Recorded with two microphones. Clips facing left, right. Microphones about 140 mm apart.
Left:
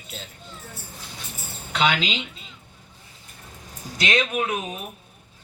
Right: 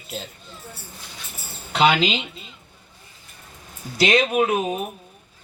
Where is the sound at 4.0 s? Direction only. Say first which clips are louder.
Right 6 dB; 35° right (ahead or behind).